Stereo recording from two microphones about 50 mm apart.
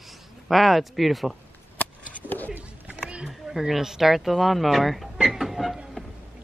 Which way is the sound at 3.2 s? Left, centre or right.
Centre.